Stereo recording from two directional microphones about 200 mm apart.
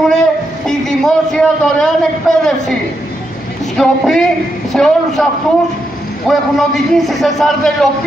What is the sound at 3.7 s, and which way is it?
A man's voice, centre (ahead or behind).